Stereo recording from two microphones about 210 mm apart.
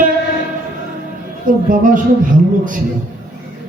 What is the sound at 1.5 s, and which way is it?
Speech, 40° right (ahead or behind).